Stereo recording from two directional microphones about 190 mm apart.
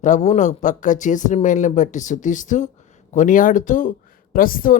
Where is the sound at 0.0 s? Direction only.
40° left (ahead or behind).